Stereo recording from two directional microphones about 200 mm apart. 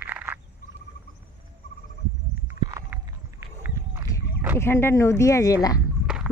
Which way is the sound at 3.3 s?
15° right (ahead or behind).